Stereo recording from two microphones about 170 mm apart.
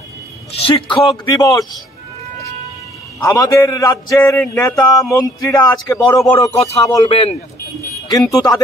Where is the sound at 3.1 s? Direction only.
20° left (ahead or behind).